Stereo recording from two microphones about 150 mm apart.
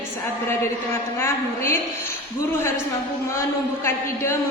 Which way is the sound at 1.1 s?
15° left (ahead or behind).